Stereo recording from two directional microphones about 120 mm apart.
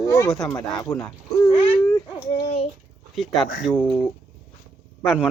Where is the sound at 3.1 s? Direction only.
Centre (ahead or behind).